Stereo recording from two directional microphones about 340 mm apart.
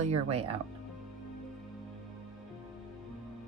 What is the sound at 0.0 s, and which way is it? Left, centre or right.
Speech, centre.